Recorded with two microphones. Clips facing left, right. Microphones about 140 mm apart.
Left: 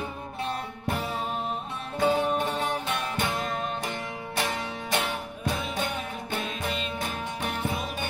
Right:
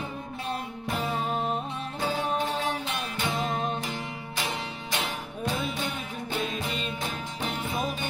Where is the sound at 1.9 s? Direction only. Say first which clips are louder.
Left 5 dB; 60° left (ahead or behind).